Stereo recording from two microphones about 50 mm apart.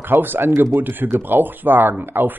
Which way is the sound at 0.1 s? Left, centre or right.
Right.